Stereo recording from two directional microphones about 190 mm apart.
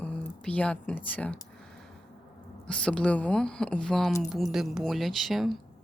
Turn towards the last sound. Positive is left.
turn(degrees=0)  # may be behind; listen again after turning